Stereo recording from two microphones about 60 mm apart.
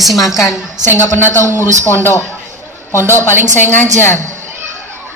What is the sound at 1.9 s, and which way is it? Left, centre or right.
Speech, left.